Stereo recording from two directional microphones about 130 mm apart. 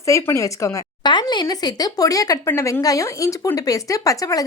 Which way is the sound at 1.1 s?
35° left (ahead or behind).